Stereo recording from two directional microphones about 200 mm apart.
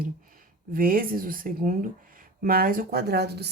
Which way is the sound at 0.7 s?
45° right (ahead or behind).